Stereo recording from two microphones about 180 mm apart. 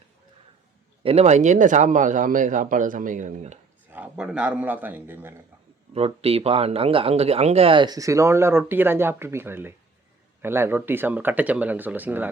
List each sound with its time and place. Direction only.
1.0 s speech: 35° right (ahead or behind)
3.9 s speech: 5° right (ahead or behind)
5.9 s speech: 35° right (ahead or behind); by 12.3 s 10° right (ahead or behind)